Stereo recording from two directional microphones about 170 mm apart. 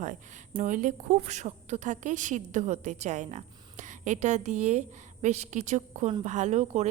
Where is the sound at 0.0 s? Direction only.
50° right (ahead or behind).